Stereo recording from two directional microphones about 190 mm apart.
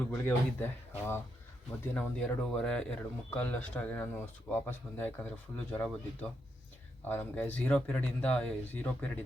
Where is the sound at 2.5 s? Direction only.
5° left (ahead or behind).